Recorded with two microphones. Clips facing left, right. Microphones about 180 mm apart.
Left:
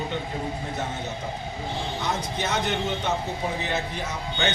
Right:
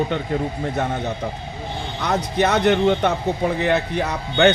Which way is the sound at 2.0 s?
65° right (ahead or behind).